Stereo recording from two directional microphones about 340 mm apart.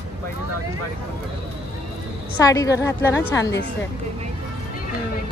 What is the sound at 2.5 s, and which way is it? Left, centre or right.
Speech, centre.